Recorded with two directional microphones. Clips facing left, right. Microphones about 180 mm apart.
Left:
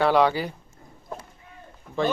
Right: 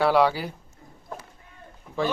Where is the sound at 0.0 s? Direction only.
5° right (ahead or behind).